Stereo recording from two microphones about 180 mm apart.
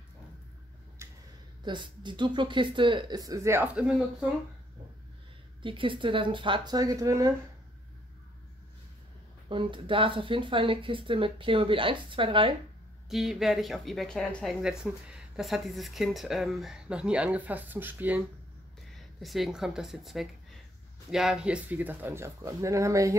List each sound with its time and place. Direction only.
1.0 s a sound: 15° right (ahead or behind)
1.6 s speech: 25° right (ahead or behind); by 4.3 s 5° right (ahead or behind)
5.6 s speech: 30° right (ahead or behind)
9.5 s speech: 30° right (ahead or behind)
13.1 s speech: centre (ahead or behind); by 23.1 s 15° right (ahead or behind)